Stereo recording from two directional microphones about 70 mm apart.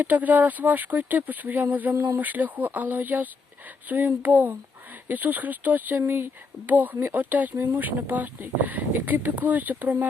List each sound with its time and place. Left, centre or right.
0.0 s speech: right